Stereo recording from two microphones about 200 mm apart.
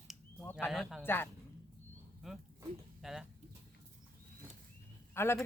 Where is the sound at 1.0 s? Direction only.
10° left (ahead or behind).